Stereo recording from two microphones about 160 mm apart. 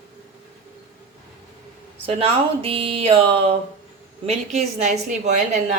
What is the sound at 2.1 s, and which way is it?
A woman's voice, 35° right (ahead or behind).